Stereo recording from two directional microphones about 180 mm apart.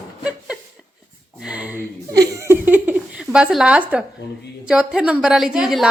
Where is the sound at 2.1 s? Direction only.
20° right (ahead or behind).